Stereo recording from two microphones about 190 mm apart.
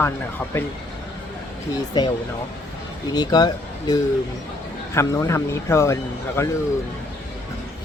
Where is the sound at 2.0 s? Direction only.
20° left (ahead or behind).